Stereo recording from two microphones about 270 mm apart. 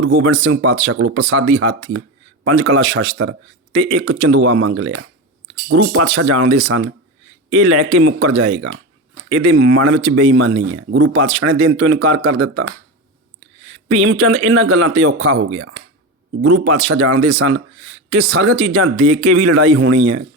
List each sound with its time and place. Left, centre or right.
0.0 s speech: right
14.1 s speech: right